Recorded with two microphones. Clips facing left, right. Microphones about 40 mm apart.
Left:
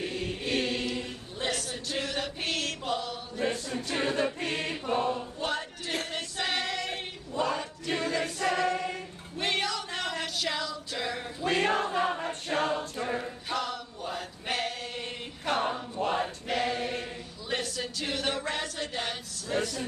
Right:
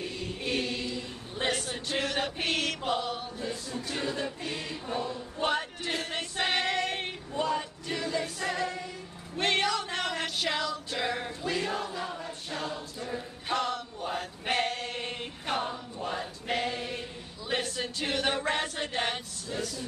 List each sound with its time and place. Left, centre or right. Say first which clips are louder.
0.0 s choir: left 2 dB; left
1.4 s chant: right 2 dB; right
3.3 s choir: left 4 dB; left
5.4 s a sound: right 3 dB; centre
6.1 s choir: right 4 dB; centre
7.4 s choir: right 1 dB; left
9.4 s music: right 3 dB; centre
11.4 s choir: left 6 dB; left
13.5 s male singing: right 4 dB; centre
15.6 s choir: left 5 dB; left
16.6 s chant: left 3 dB; left
17.5 s a sound: right 1 dB; centre
17.8 s choir: right 2 dB; centre
19.5 s a sound: left 5 dB; left